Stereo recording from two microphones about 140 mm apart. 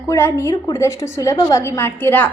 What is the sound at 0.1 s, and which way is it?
A woman's voice, 20° left (ahead or behind).